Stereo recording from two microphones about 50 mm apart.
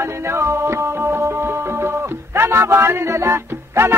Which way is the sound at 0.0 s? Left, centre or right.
Right.